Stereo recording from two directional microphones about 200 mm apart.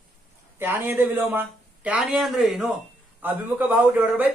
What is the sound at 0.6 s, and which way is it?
A man's voice, 10° right (ahead or behind).